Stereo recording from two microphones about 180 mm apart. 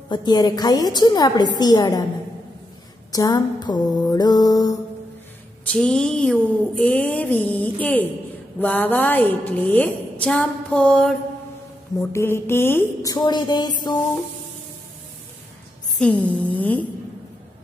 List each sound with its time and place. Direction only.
0.1 s a woman's voice: 25° left (ahead or behind)
3.1 s a woman's voice: 20° left (ahead or behind)
5.7 s a woman's voice: 5° left (ahead or behind)
12.0 s a woman's voice: 15° left (ahead or behind)
16.0 s a woman's voice: 5° left (ahead or behind)